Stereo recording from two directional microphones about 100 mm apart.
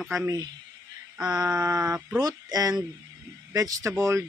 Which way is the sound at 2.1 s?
40° right (ahead or behind).